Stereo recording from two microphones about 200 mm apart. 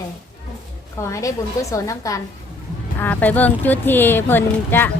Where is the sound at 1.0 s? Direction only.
15° left (ahead or behind).